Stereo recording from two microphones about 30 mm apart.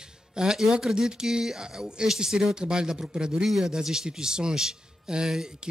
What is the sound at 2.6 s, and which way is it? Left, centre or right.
Speech, right.